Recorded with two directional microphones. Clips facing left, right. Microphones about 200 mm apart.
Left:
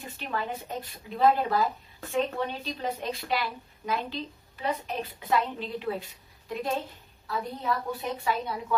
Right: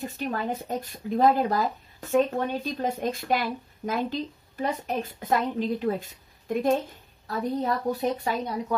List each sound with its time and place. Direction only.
0.0 s speech: 40° right (ahead or behind)